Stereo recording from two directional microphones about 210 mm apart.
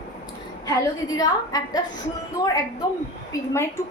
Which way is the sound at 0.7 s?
15° left (ahead or behind).